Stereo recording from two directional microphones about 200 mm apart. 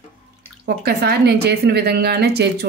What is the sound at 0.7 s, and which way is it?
A woman's voice, 50° right (ahead or behind).